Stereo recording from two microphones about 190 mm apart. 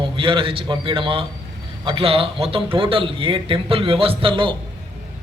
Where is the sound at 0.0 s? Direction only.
25° right (ahead or behind).